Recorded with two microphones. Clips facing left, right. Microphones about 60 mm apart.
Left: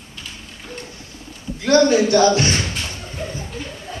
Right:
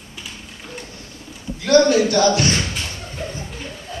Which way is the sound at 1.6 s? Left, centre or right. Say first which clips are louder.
Even; left.